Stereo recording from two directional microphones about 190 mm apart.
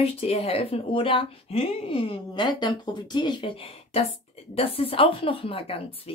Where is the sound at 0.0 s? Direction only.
30° left (ahead or behind).